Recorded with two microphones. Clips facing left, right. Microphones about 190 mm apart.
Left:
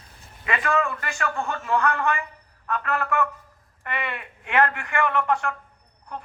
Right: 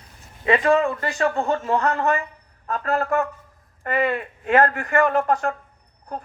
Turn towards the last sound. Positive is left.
turn(degrees=-40)  # may be behind; listen again after turning